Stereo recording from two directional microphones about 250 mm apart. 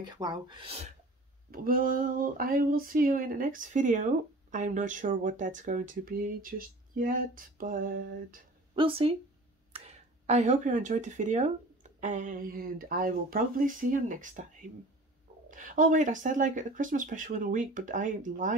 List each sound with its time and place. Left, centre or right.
0.1 s speech: centre
1.5 s speech: right
8.7 s speech: right